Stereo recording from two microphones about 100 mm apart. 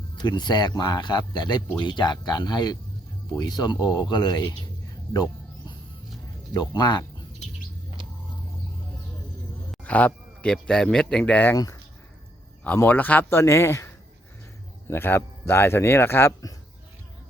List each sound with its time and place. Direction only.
0.2 s speech: 45° left (ahead or behind)
6.5 s speech: 45° left (ahead or behind)
9.8 s speech: 15° left (ahead or behind)
11.5 s speech: 40° left (ahead or behind)
12.6 s speech: 20° left (ahead or behind)